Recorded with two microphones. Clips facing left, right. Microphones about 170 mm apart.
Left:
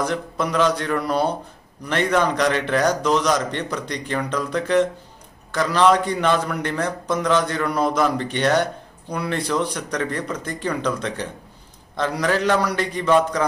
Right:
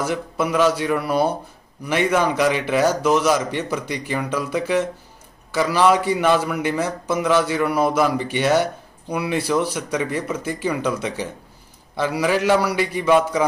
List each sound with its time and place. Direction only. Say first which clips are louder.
0.0 s a man's voice: right 1 dB; 5° right (ahead or behind)